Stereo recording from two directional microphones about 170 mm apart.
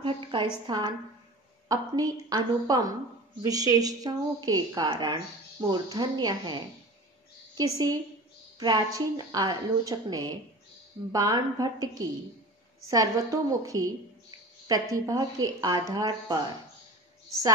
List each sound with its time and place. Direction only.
0.0 s a sound: 30° right (ahead or behind)
0.7 s a woman's voice: 25° right (ahead or behind)
12.9 s a woman's voice: 20° right (ahead or behind)